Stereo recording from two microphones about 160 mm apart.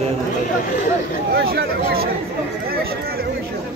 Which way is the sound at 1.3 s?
80° right.